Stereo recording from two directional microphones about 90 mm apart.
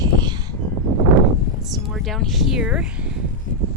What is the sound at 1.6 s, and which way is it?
Speech, centre (ahead or behind).